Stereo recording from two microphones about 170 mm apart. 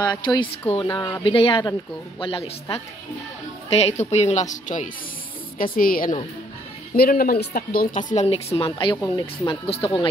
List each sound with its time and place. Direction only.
0.0 s speech: 25° left (ahead or behind)
3.7 s a woman's voice: 40° left (ahead or behind)
8.9 s speech: 15° left (ahead or behind)
9.5 s a woman's voice: 35° left (ahead or behind)